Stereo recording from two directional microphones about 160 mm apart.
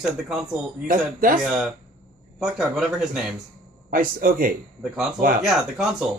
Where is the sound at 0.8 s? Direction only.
60° right (ahead or behind).